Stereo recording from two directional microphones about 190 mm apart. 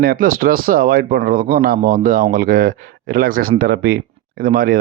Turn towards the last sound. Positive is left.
turn(degrees=-50)  # may be behind; listen again after turning